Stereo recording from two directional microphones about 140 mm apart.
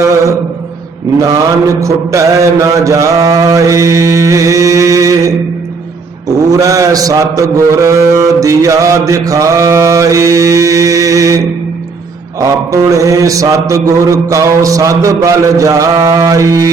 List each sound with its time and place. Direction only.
1.8 s mantra: 20° right (ahead or behind)